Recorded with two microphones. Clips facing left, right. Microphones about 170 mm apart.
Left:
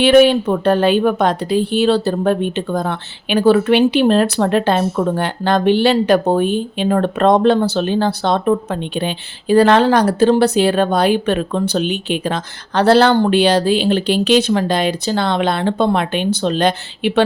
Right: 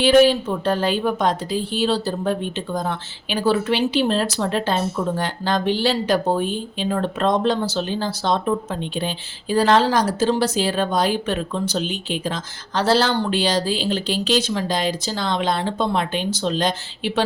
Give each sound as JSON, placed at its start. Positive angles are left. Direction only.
{"t": 0.0, "sound": "a woman's voice", "side_deg": 65}